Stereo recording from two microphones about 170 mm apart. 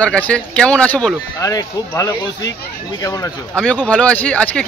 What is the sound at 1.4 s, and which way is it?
Speech, 20° left (ahead or behind).